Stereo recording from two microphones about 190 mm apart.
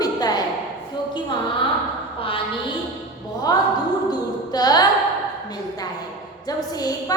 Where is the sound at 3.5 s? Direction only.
20° left (ahead or behind).